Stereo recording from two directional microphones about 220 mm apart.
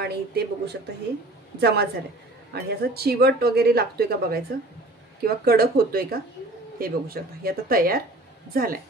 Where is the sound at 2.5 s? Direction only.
45° right (ahead or behind).